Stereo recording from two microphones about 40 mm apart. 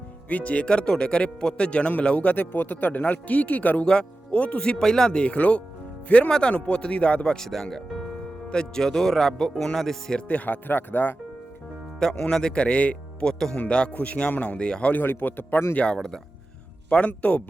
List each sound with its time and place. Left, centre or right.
0.3 s speech: left
2.3 s speech: left
4.8 s speech: centre
5.1 s speech: left
7.3 s speech: centre
10.2 s speech: left
11.9 s speech: centre; by 13.2 s left
13.2 s speech: centre
13.9 s speech: left
14.6 s speech: left
14.9 s speech: left
15.9 s speech: centre
17.1 s speech: left